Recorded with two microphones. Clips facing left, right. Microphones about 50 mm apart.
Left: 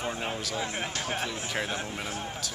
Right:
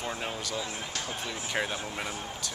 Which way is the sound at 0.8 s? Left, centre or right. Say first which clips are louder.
Left 4 dB; left.